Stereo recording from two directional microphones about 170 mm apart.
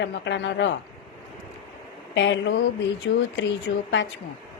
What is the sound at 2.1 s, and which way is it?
A woman's voice, 90° left.